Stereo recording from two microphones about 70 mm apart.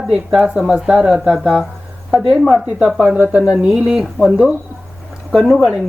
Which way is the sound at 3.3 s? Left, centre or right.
Centre.